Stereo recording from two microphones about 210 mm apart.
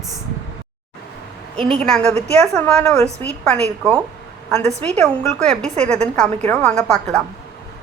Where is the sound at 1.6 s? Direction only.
5° left (ahead or behind).